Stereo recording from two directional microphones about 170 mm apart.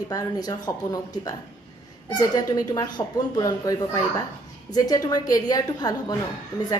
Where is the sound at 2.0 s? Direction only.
20° left (ahead or behind).